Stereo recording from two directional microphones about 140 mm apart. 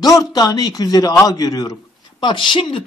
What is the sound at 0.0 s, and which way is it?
A man's voice, 25° left (ahead or behind).